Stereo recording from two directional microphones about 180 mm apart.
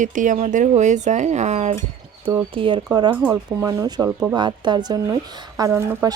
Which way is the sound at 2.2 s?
30° right (ahead or behind).